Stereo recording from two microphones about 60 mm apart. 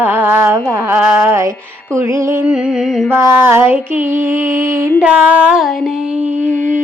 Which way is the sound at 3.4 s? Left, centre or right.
Right.